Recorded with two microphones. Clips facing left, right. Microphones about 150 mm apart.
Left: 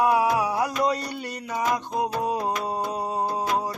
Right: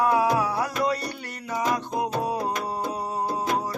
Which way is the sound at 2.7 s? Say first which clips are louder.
Left 1 dB; 20° left (ahead or behind).